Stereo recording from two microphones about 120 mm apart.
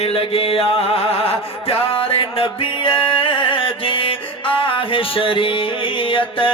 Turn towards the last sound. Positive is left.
turn(degrees=45)  # may be behind; listen again after turning